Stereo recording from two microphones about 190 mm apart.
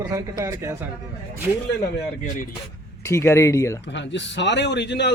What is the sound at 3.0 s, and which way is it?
Speech, 15° left (ahead or behind).